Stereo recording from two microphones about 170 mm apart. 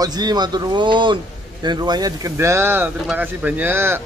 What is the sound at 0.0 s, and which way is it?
Speech, 25° right (ahead or behind).